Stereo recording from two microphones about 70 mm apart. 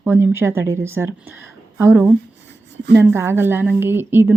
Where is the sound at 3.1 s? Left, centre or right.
Right.